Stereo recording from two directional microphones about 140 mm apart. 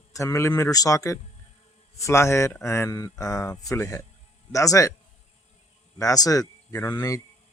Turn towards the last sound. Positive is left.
turn(degrees=20)  # may be behind; listen again after turning